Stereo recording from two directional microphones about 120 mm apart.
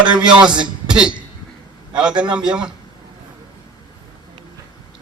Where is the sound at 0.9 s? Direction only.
5° right (ahead or behind).